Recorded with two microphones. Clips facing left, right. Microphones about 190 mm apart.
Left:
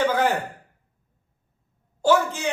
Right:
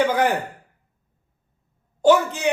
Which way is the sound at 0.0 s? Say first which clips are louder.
Right 2 dB; 15° right (ahead or behind).